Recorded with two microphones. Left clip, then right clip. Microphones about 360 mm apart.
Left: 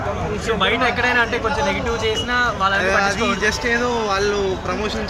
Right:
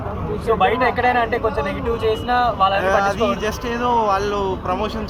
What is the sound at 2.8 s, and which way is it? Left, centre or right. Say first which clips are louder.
Speech: right 1 dB; centre.